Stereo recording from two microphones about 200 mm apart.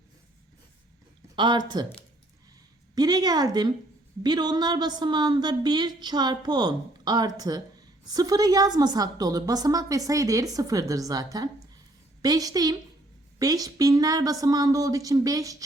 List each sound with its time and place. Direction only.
1.4 s a woman's voice: 20° right (ahead or behind)
2.9 s a woman's voice: 20° right (ahead or behind)